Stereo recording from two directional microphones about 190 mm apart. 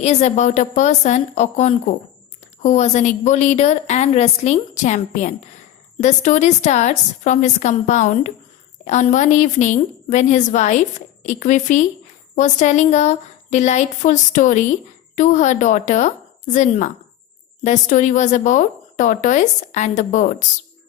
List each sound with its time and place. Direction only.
0.0 s a woman's voice: 35° left (ahead or behind)